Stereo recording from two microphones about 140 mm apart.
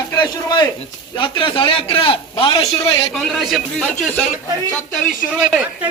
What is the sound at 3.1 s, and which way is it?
Speech, centre (ahead or behind).